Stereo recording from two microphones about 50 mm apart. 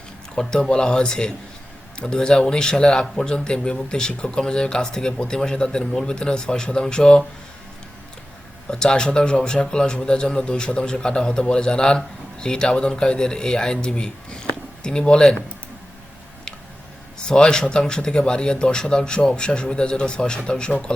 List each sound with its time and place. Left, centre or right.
0.3 s speech: centre
8.7 s speech: centre
17.2 s speech: centre